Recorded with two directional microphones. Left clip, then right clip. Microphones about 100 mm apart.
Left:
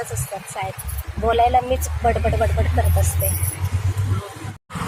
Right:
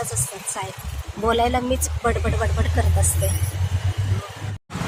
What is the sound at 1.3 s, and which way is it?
Speech, 25° right (ahead or behind).